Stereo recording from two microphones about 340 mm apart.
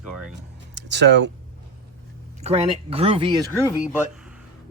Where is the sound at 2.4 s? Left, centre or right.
Centre.